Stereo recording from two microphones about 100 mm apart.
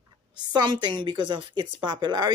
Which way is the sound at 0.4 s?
45° right (ahead or behind).